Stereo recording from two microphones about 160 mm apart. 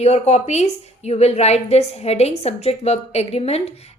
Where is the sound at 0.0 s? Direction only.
40° left (ahead or behind).